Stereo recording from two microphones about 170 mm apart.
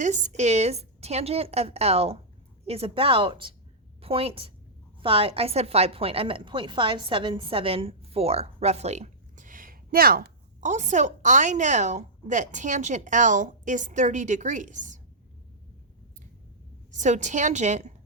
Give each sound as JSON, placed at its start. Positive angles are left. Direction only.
{"t": 0.0, "sound": "a woman's voice", "side_deg": -45}
{"t": 8.5, "sound": "a sound", "side_deg": -40}
{"t": 10.7, "sound": "a woman's voice", "side_deg": -45}
{"t": 16.9, "sound": "a woman's voice", "side_deg": -45}